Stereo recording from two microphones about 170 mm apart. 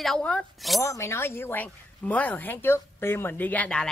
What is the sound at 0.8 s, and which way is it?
Speech, 15° left (ahead or behind).